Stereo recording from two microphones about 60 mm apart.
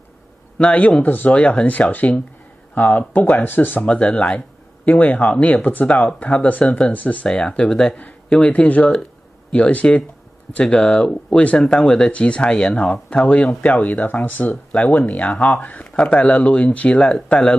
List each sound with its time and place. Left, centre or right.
0.6 s speech: left
1.3 s speech: left
3.8 s speech: left
7.2 s speech: centre
11.5 s speech: centre